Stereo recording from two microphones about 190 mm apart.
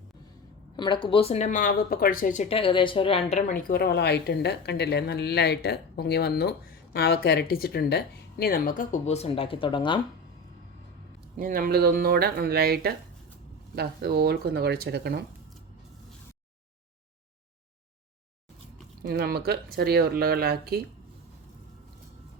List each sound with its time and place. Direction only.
0.8 s speech: 25° left (ahead or behind)
11.3 s speech: 45° right (ahead or behind)
19.0 s speech: 55° right (ahead or behind)